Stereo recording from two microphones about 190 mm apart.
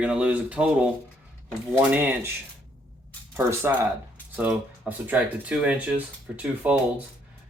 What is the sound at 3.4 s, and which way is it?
Speech, 15° right (ahead or behind).